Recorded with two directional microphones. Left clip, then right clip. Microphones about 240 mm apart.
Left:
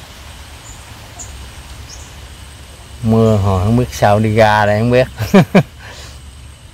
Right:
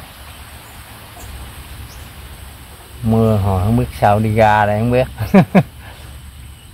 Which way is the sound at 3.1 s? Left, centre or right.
Left.